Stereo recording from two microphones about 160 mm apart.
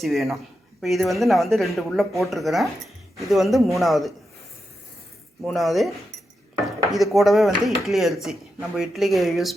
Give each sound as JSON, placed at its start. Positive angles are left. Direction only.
{"t": 0.0, "sound": "speech", "side_deg": 0}
{"t": 5.5, "sound": "speech", "side_deg": 0}
{"t": 6.9, "sound": "speech", "side_deg": 0}